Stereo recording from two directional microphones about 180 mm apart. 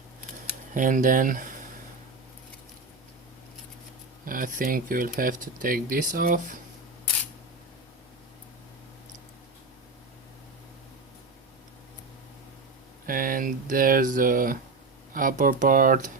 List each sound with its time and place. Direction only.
0.7 s speech: 45° right (ahead or behind)
4.3 s speech: 50° right (ahead or behind)
13.1 s speech: 50° right (ahead or behind)